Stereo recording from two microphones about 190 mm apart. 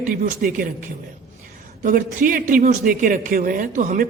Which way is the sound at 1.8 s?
45° right (ahead or behind).